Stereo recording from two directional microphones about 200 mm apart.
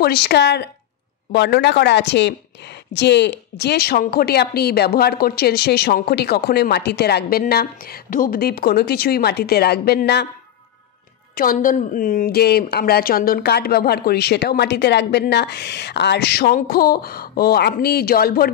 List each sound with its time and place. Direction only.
0.0 s a woman's voice: 55° left (ahead or behind)
11.3 s a woman's voice: 45° left (ahead or behind)